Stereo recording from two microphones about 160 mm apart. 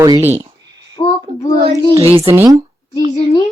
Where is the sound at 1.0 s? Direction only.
35° left (ahead or behind).